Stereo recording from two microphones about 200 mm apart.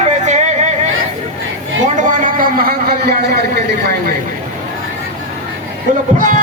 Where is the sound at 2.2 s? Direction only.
45° right (ahead or behind).